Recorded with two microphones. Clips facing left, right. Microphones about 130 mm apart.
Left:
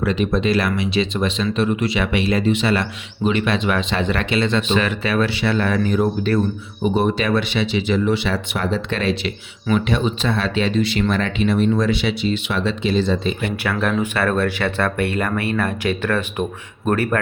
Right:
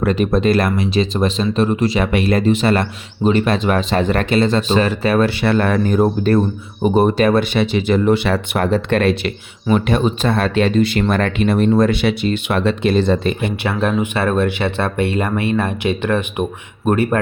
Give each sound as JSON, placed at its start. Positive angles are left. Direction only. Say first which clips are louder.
{"t": 0.0, "sound": "speech", "louder": "right 4 dB", "side_deg": -50}
{"t": 13.4, "sound": "speech", "louder": "right 3 dB", "side_deg": -25}